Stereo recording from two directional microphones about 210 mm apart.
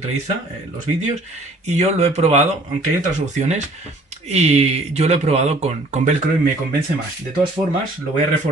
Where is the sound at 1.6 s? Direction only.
30° right (ahead or behind).